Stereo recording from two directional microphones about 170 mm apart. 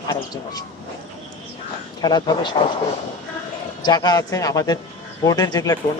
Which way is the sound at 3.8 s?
25° left (ahead or behind).